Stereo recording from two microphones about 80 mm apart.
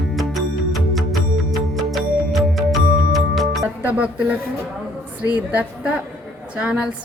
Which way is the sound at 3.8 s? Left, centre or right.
Centre.